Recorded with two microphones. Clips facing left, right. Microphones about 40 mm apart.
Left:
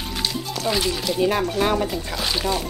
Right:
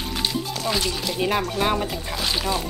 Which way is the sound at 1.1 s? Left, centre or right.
Centre.